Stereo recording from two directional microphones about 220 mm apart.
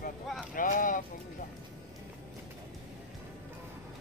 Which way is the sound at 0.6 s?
35° left (ahead or behind).